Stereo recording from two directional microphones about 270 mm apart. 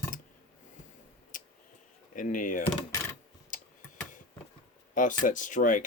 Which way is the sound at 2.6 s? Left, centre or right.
Centre.